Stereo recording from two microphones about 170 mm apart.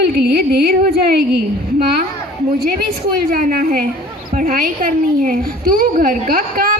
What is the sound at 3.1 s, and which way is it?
A woman's voice, 55° right (ahead or behind).